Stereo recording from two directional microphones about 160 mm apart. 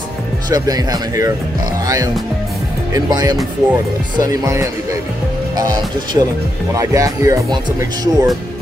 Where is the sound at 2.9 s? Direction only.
25° right (ahead or behind).